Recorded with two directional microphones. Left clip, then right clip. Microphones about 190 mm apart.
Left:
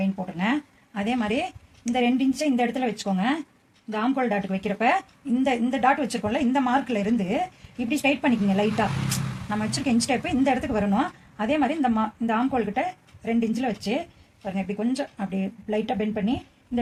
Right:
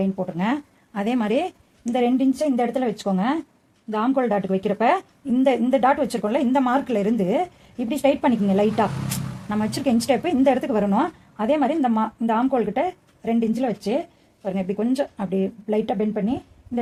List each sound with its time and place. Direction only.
0.3 s a woman's voice: 55° right (ahead or behind)